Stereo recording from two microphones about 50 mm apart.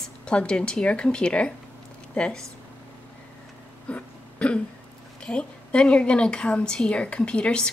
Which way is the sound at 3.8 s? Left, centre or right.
Left.